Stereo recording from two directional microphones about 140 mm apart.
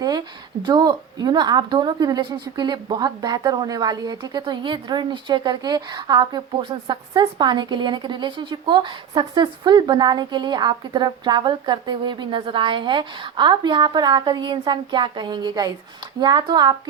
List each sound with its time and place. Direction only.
0.6 s a woman's voice: 30° right (ahead or behind)